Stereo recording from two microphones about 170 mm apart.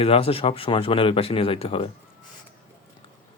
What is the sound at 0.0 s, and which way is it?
Speech, 35° left (ahead or behind).